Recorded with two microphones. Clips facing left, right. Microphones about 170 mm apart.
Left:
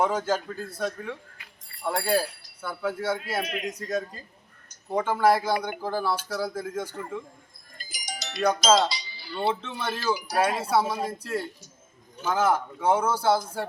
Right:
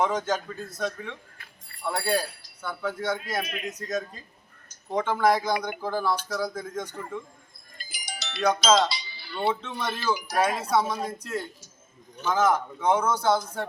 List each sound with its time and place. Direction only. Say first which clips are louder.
0.0 s speech: left 1 dB; 10° left (ahead or behind)
7.8 s music: left 2 dB; 40° left (ahead or behind)
8.4 s speech: even; 5° left (ahead or behind)
9.0 s music: even; 40° left (ahead or behind)
9.6 s speech: even; 5° left (ahead or behind)